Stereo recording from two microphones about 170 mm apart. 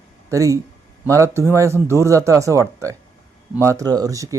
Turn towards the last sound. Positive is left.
turn(degrees=-20)  # may be behind; listen again after turning